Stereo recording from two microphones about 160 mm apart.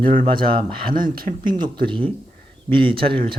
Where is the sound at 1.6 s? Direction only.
30° right (ahead or behind).